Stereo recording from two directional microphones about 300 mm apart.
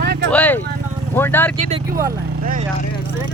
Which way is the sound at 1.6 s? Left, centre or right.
Right.